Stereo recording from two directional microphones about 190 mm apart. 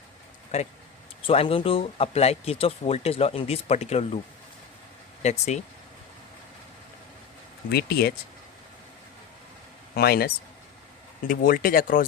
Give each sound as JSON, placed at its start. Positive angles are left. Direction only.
{"t": 0.5, "sound": "speech", "side_deg": 35}
{"t": 5.2, "sound": "speech", "side_deg": 35}
{"t": 7.7, "sound": "speech", "side_deg": 55}
{"t": 9.9, "sound": "speech", "side_deg": 55}